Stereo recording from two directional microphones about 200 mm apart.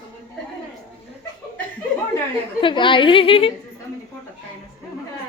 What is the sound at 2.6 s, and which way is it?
Speech, 25° left (ahead or behind).